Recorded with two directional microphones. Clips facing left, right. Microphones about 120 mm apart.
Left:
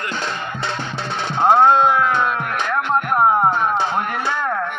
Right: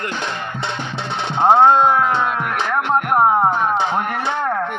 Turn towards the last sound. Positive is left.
turn(degrees=-25)  # may be behind; listen again after turning